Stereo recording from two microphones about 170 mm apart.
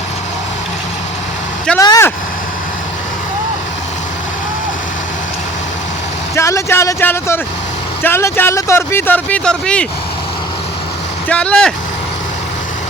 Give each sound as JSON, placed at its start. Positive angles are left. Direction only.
{"t": 1.8, "sound": "vehicle", "side_deg": 20}
{"t": 6.3, "sound": "speech", "side_deg": 15}
{"t": 11.3, "sound": "speech", "side_deg": 5}